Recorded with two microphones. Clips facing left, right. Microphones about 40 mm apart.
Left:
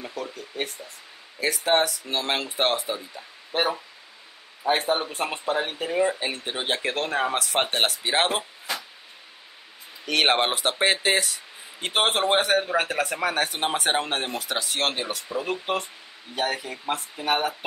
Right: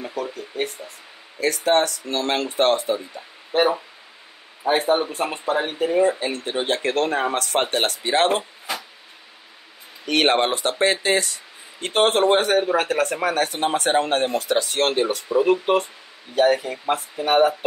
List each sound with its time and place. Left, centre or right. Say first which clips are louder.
0.0 s speech: right 5 dB; centre
1.4 s speech: right 3 dB; centre
6.1 s speech: right 5 dB; centre
10.0 s speech: right 3 dB; centre
15.4 s speech: right 9 dB; centre
16.9 s speech: right 6 dB; centre